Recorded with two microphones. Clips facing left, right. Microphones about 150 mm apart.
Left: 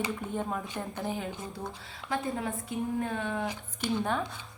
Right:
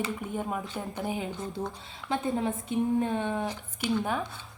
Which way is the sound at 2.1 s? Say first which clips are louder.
Right 3 dB; 25° right (ahead or behind).